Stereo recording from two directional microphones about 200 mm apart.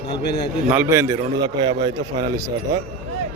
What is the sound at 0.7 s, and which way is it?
A man's voice, 10° right (ahead or behind).